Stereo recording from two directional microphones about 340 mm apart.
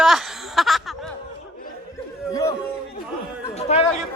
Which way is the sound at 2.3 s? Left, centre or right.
Centre.